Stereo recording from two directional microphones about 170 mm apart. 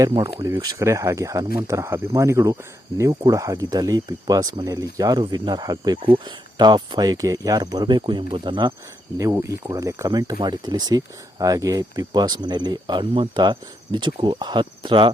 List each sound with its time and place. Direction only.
0.3 s speech: 15° right (ahead or behind)
9.1 s speech: 15° right (ahead or behind)